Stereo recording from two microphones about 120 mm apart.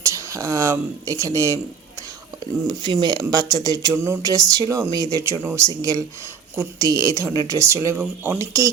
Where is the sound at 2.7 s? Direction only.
35° right (ahead or behind).